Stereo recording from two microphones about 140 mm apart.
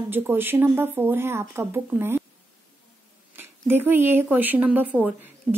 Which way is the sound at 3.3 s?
15° right (ahead or behind).